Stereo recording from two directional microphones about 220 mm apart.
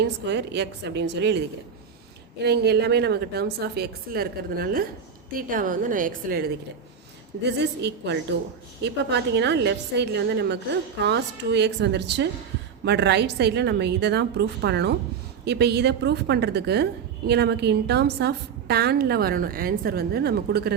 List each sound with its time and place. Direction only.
0.3 s a woman's voice: 50° right (ahead or behind)
2.4 s a woman's voice: 50° right (ahead or behind)